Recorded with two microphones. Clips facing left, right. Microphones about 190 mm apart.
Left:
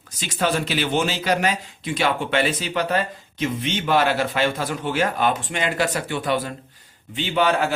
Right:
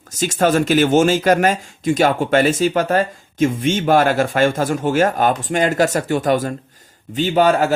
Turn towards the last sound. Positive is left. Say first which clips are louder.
# right 6 dB
turn(degrees=-40)  # may be behind; listen again after turning